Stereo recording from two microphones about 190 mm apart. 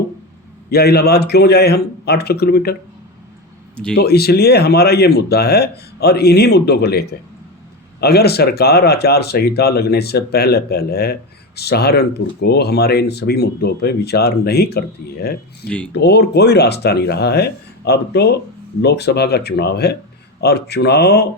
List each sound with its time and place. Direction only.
0.7 s speech: 55° left (ahead or behind)
3.9 s speech: 55° left (ahead or behind)
15.6 s speech: 5° left (ahead or behind)
15.9 s speech: 60° left (ahead or behind)